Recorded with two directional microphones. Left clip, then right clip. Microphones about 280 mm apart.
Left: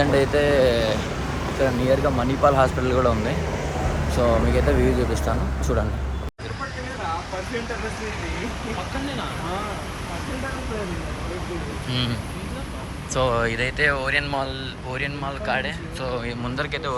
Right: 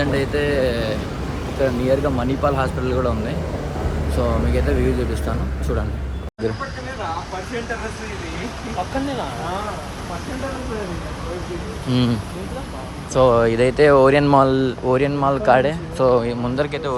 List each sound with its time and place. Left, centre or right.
0.0 s speech: centre
11.9 s speech: centre
13.1 s speech: centre